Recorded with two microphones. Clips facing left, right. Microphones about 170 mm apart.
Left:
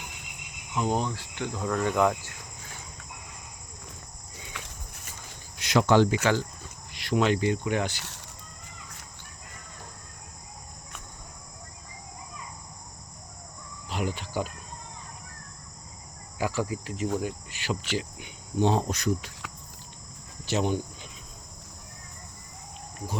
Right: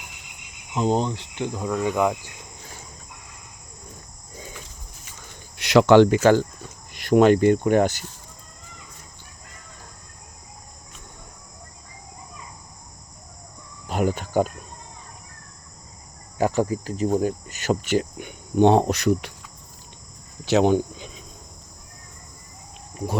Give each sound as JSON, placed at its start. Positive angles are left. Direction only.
{"t": 0.7, "sound": "speech", "side_deg": -25}
{"t": 4.6, "sound": "a sound", "side_deg": 80}
{"t": 5.5, "sound": "speech", "side_deg": -75}
{"t": 6.9, "sound": "cricket", "side_deg": -50}
{"t": 13.8, "sound": "cricket", "side_deg": -50}
{"t": 16.4, "sound": "cricket", "side_deg": -40}
{"t": 20.4, "sound": "speech", "side_deg": -85}